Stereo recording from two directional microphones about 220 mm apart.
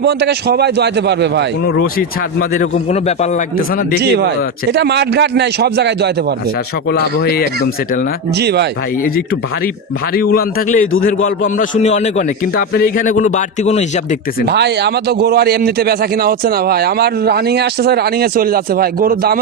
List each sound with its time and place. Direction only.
0.0 s a man's voice: 50° right (ahead or behind)
2.6 s speech: 35° left (ahead or behind)
4.7 s a man's voice: 50° right (ahead or behind)
6.9 s a man's voice: 45° left (ahead or behind)
8.4 s a man's voice: 50° right (ahead or behind)
10.2 s a man's voice: 45° left (ahead or behind)
14.4 s a man's voice: 50° right (ahead or behind)